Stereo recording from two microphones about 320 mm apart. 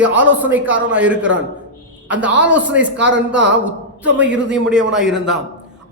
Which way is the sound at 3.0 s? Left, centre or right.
Right.